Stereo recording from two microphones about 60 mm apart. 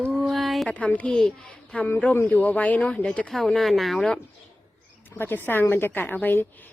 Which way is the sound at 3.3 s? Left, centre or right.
Centre.